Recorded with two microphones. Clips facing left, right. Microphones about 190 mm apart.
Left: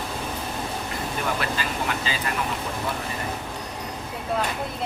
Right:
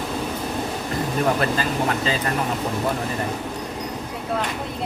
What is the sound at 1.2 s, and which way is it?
Speech, 35° right (ahead or behind).